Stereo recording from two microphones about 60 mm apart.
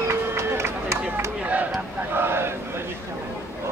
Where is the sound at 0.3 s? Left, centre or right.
Right.